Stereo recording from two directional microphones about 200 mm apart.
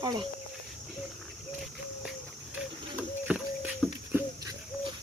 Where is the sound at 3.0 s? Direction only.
5° right (ahead or behind).